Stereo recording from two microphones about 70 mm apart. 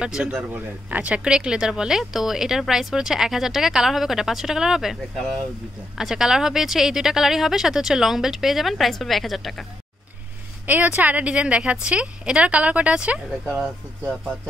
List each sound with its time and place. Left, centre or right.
0.0 s speech: centre
5.9 s speech: centre
10.7 s speech: right
14.0 s speech: centre